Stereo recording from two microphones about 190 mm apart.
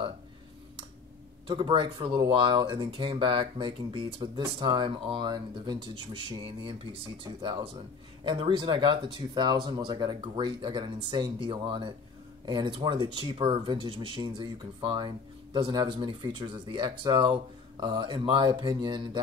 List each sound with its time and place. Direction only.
1.5 s speech: 25° right (ahead or behind)